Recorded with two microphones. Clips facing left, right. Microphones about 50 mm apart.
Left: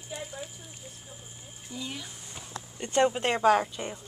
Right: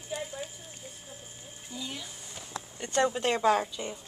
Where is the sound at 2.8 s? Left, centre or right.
Left.